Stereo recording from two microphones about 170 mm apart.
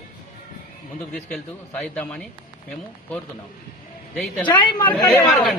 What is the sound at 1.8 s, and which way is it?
Speech, 10° left (ahead or behind).